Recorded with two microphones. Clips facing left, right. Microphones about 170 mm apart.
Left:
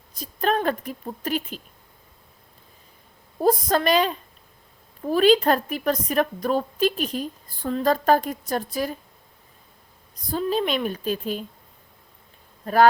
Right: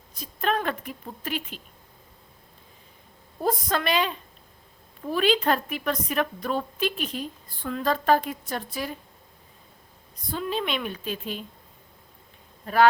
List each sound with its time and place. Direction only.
0.1 s speech: 35° left (ahead or behind)
3.4 s a woman's voice: 40° left (ahead or behind)
10.3 s a woman's voice: 35° left (ahead or behind)
12.6 s speech: 40° left (ahead or behind)